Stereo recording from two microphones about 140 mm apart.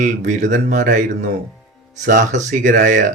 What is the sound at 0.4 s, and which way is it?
Speech, 65° right (ahead or behind).